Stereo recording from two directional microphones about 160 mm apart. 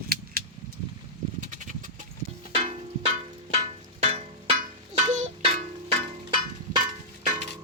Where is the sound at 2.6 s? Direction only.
35° right (ahead or behind).